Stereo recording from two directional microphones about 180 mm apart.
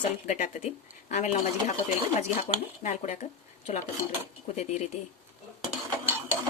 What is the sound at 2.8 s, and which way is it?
Speech, 35° left (ahead or behind).